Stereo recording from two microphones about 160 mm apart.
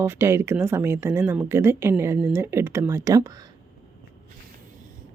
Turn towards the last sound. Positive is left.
turn(degrees=-20)  # may be behind; listen again after turning